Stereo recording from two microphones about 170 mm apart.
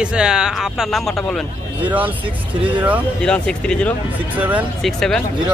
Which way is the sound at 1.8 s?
10° right (ahead or behind).